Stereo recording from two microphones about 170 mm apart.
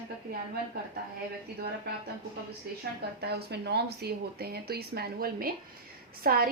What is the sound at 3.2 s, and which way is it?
A woman's voice, 75° right (ahead or behind).